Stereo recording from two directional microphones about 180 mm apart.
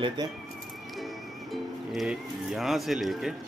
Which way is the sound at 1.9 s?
5° right (ahead or behind).